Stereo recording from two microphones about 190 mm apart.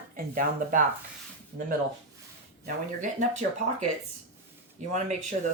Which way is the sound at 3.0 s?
40° right (ahead or behind).